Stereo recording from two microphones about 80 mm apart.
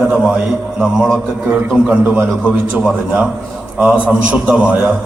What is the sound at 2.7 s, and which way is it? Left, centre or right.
A man's voice, centre.